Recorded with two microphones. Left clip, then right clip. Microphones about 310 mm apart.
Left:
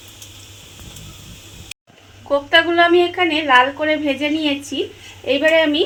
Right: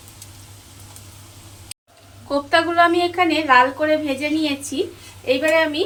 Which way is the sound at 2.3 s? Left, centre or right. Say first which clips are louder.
Left 3 dB; left.